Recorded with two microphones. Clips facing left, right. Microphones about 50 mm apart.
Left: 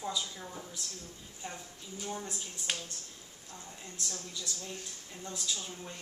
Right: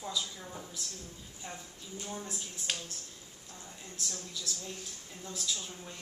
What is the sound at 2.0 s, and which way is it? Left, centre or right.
Speech, centre.